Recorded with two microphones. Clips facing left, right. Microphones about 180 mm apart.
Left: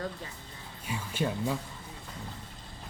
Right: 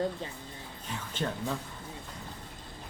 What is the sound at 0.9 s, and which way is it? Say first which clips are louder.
Speech: left 3 dB; 10° left (ahead or behind).